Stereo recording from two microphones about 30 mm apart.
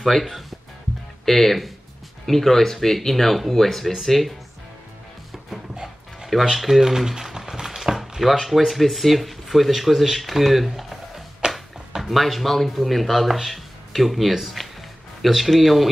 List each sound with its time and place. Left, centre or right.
0.0 s speech: centre
1.2 s speech: centre
6.5 s speech: centre
6.8 s a sound: centre
8.2 s speech: centre
14.6 s music: centre
15.2 s speech: centre